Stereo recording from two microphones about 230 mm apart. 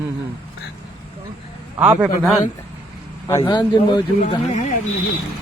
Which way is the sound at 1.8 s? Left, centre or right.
Centre.